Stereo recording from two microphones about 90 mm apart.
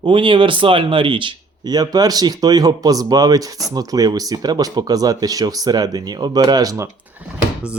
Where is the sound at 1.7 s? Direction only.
45° right (ahead or behind).